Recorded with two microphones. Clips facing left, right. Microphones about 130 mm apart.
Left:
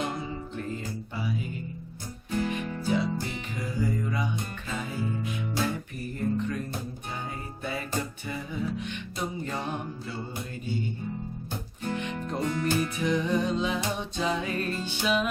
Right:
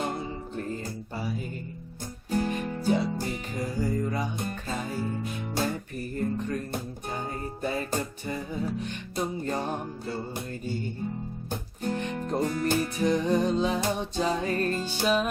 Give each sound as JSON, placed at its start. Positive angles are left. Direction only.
{"t": 0.0, "sound": "music", "side_deg": -35}
{"t": 7.6, "sound": "music", "side_deg": -40}
{"t": 11.8, "sound": "music", "side_deg": -40}